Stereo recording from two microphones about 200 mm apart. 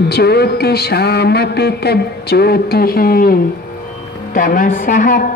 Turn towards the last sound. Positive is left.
turn(degrees=40)  # may be behind; listen again after turning